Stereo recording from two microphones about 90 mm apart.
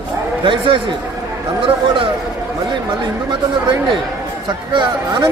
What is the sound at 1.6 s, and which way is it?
Speech, 80° right.